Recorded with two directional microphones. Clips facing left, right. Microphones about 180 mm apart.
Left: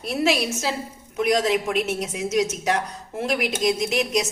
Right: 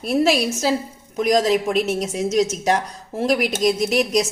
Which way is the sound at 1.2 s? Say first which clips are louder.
Right 3 dB; 40° right (ahead or behind).